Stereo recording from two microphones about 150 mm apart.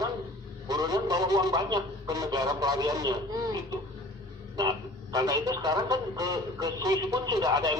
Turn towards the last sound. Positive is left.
turn(degrees=-25)  # may be behind; listen again after turning